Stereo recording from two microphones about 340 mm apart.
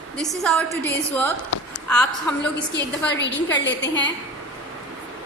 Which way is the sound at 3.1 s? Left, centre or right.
Left.